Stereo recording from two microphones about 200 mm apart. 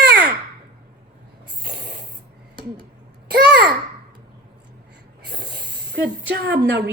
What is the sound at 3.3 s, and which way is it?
Babbling, 55° right (ahead or behind).